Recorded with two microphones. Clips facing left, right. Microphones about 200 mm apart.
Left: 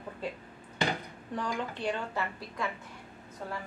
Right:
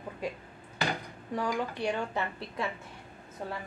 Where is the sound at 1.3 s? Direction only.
10° right (ahead or behind).